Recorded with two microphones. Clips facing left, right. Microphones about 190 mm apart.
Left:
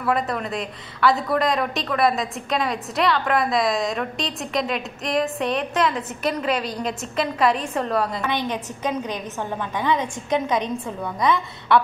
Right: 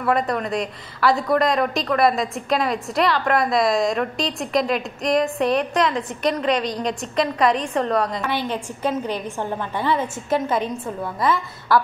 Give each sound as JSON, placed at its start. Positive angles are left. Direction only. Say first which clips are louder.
{"t": 0.0, "sound": "a woman's voice", "louder": "right 2 dB", "side_deg": 0}
{"t": 8.3, "sound": "a woman's voice", "louder": "even", "side_deg": 15}
{"t": 9.6, "sound": "a woman's voice", "louder": "left 1 dB", "side_deg": 15}
{"t": 9.9, "sound": "a woman's voice", "louder": "right 1 dB", "side_deg": -5}
{"t": 10.3, "sound": "a woman's voice", "louder": "right 1 dB", "side_deg": 20}